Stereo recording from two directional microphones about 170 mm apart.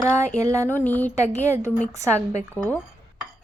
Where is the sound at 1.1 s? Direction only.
40° left (ahead or behind).